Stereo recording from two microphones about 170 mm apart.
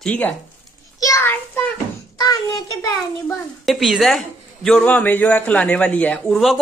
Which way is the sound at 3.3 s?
Centre (ahead or behind).